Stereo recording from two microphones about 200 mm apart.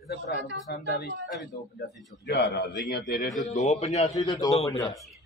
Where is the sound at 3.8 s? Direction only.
35° left (ahead or behind).